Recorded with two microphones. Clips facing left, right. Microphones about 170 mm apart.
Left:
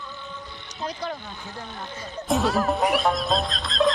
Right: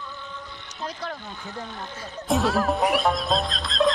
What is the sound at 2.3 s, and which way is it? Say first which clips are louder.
Speech: even; centre (ahead or behind).